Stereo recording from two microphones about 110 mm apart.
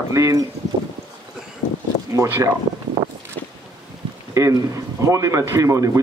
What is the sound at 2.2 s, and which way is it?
Speech, 20° right (ahead or behind).